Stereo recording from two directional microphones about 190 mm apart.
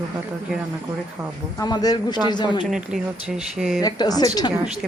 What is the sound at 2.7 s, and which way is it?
Speech, 5° right (ahead or behind).